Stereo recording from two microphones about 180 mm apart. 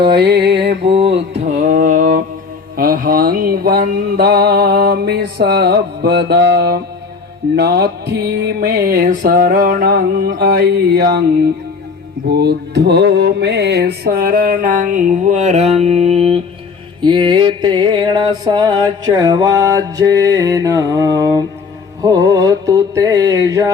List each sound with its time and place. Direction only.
0.1 s mantra: 65° right (ahead or behind)
1.3 s a sound: 40° right (ahead or behind)
2.7 s mantra: 55° right (ahead or behind)
12.3 s music: 65° right (ahead or behind); by 23.7 s 20° right (ahead or behind)